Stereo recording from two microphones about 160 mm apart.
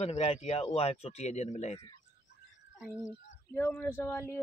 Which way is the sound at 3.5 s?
15° left (ahead or behind).